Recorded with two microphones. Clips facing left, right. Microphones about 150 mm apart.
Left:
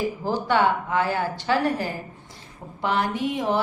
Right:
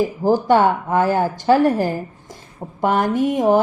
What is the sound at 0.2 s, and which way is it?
Speech, 45° right (ahead or behind).